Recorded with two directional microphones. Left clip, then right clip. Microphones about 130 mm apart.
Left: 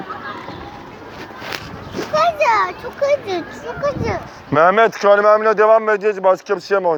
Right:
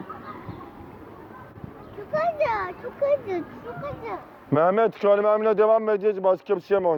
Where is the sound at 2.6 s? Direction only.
20° left (ahead or behind).